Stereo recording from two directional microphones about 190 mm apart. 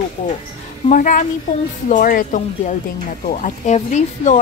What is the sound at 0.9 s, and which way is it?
A woman's voice, 45° left (ahead or behind).